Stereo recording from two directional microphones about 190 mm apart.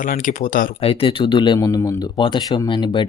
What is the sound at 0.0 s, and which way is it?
Speech, 45° left (ahead or behind).